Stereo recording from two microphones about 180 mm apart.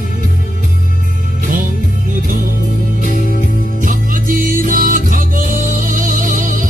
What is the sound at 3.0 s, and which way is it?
Music, 50° left (ahead or behind).